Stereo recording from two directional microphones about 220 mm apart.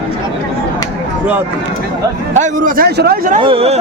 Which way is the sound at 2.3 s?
35° right (ahead or behind).